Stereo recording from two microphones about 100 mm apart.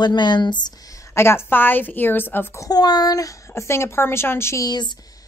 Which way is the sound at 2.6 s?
40° left (ahead or behind).